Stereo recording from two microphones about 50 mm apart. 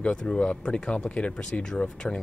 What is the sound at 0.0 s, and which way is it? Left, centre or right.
Speech, centre.